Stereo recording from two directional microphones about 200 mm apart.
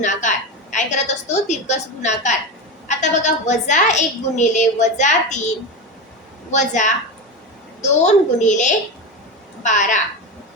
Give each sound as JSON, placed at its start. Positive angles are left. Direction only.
{"t": 0.0, "sound": "a woman's voice", "side_deg": 40}
{"t": 6.5, "sound": "a woman's voice", "side_deg": 35}